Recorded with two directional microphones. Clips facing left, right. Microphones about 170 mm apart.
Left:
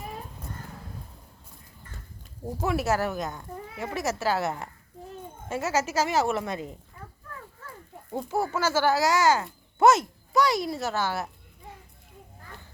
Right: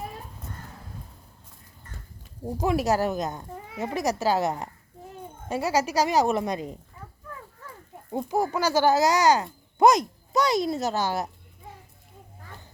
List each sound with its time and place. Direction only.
2.6 s speech: 15° right (ahead or behind)
8.1 s speech: 15° right (ahead or behind)